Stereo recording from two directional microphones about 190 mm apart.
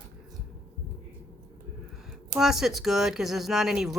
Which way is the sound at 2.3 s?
Centre (ahead or behind).